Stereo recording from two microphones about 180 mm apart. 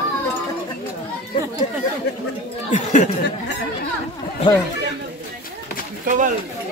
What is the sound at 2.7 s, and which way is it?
Speech, 40° left (ahead or behind).